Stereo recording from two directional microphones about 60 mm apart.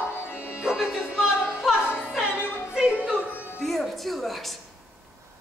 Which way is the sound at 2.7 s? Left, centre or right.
Centre.